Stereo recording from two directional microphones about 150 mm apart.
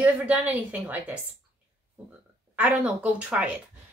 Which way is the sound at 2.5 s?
10° right (ahead or behind).